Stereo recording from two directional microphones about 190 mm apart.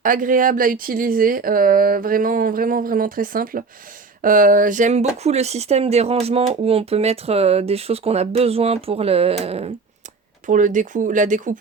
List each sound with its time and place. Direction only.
0.0 s speech: 45° right (ahead or behind)